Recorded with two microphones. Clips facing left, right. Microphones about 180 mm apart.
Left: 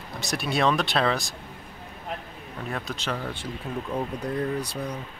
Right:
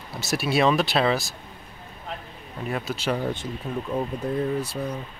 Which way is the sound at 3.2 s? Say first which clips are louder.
Right 6 dB; 20° right (ahead or behind).